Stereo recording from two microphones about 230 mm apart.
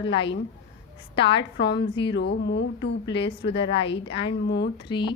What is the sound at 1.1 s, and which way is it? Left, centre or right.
Speech, left.